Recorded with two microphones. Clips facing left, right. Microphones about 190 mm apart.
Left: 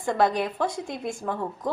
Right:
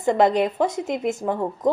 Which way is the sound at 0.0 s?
20° right (ahead or behind).